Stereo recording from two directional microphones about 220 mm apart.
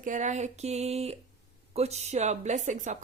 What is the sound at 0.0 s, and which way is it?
A woman's voice, 35° right (ahead or behind).